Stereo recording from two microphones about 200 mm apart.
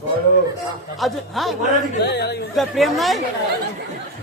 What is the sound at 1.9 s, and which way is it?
Speech, 55° left (ahead or behind).